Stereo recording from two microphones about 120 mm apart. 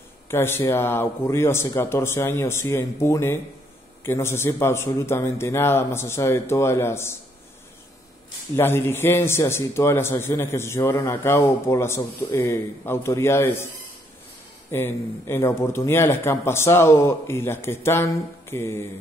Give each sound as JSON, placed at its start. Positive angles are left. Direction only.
{"t": 0.3, "sound": "a man's voice", "side_deg": 20}
{"t": 8.5, "sound": "a man's voice", "side_deg": 20}
{"t": 14.7, "sound": "a man's voice", "side_deg": 20}